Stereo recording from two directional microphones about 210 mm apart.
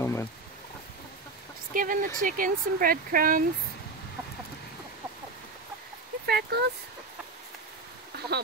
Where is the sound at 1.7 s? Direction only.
40° right (ahead or behind).